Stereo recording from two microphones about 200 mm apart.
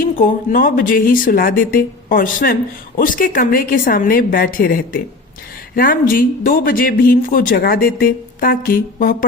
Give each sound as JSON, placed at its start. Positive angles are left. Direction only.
{"t": 0.0, "sound": "speech", "side_deg": 45}